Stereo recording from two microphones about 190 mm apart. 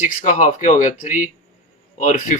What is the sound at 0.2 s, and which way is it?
Speech, 40° left (ahead or behind).